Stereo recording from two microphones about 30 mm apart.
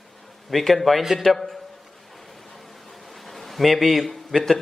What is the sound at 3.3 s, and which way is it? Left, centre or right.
A man's voice, centre.